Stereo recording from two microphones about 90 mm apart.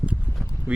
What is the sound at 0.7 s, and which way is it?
Speech, 15° right (ahead or behind).